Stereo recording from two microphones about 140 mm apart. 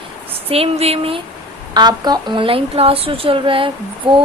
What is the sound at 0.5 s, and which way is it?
Speech, 45° right (ahead or behind).